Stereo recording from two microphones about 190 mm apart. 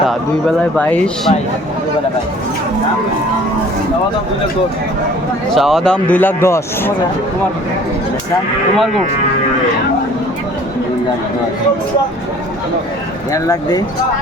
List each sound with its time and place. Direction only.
0.8 s a man's voice: 5° left (ahead or behind)
5.5 s a man's voice: centre (ahead or behind)
13.3 s speech: 20° left (ahead or behind)